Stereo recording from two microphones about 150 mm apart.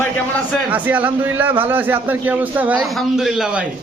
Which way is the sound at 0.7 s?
10° right (ahead or behind).